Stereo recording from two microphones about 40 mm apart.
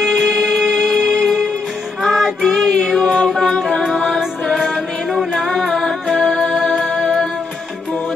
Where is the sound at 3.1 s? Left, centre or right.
Centre.